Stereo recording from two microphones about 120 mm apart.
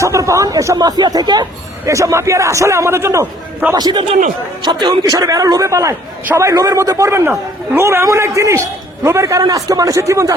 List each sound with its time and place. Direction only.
0.0 s a man's voice: 25° right (ahead or behind)
3.8 s a man's voice: 35° right (ahead or behind)